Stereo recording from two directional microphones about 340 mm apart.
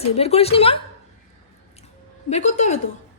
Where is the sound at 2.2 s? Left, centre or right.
Centre.